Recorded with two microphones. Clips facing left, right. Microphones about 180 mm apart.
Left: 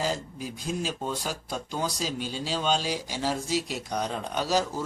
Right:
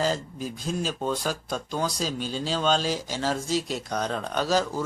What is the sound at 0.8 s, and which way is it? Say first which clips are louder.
Speech: right 6 dB; 15° left (ahead or behind).